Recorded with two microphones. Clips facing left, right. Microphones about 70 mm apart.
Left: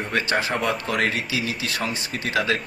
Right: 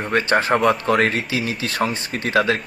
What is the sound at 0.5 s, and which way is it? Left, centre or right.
Speech, right.